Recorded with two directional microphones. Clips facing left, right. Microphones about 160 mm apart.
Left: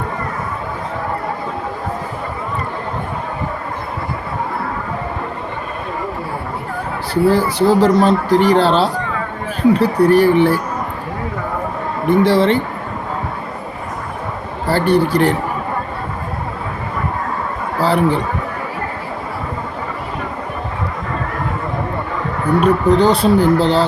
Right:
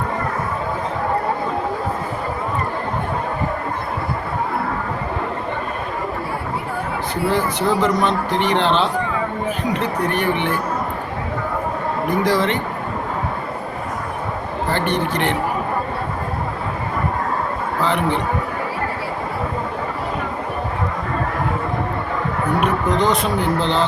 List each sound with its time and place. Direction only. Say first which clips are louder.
7.1 s speech: left 7 dB; 35° left (ahead or behind)
12.0 s speech: left 7 dB; 30° left (ahead or behind)
14.7 s speech: left 8 dB; 35° left (ahead or behind)
17.7 s speech: left 5 dB; 35° left (ahead or behind)
22.6 s speech: left 7 dB; 35° left (ahead or behind)